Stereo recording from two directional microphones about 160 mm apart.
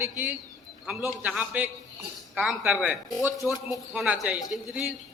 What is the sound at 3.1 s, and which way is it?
Speech, 20° left (ahead or behind).